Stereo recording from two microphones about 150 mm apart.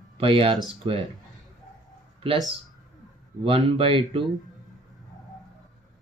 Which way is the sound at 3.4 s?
35° right (ahead or behind).